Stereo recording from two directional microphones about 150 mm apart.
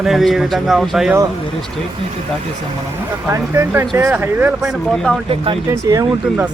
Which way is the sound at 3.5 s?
15° right (ahead or behind).